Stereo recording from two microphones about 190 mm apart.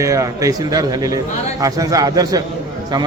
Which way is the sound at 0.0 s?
15° right (ahead or behind).